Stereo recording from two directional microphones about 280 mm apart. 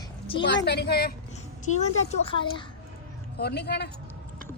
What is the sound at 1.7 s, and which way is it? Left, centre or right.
Speech, left.